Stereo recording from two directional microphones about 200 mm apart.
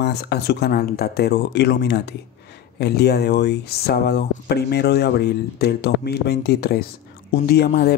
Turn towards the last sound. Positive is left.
turn(degrees=55)  # may be behind; listen again after turning